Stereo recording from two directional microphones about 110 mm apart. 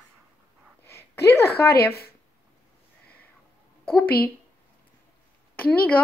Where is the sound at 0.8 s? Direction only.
25° left (ahead or behind).